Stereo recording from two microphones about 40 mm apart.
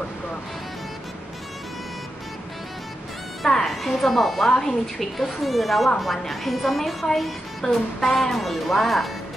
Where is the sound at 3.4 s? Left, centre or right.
Centre.